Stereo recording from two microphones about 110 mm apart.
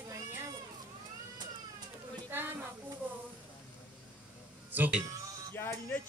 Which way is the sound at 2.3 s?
20° right (ahead or behind).